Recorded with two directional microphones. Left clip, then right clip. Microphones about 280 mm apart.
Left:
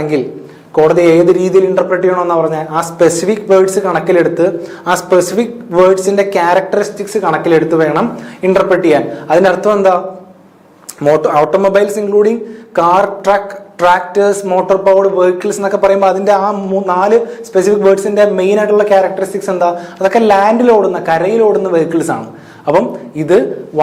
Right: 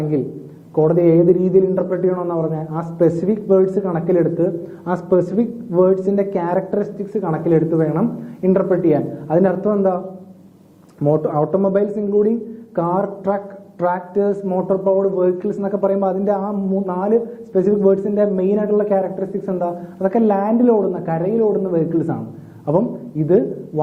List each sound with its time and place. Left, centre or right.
0.0 s a man's voice: centre
6.0 s a man's voice: centre
11.2 s a man's voice: centre
23.2 s a man's voice: centre